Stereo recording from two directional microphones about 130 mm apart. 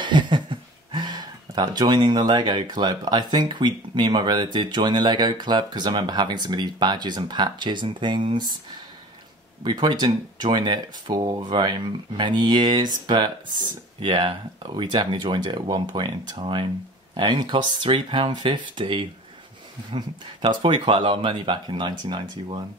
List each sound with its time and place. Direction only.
0.0 s speech: 35° right (ahead or behind)
9.6 s speech: 35° right (ahead or behind)